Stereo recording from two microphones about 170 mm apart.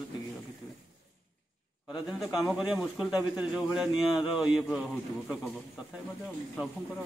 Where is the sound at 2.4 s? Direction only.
5° right (ahead or behind).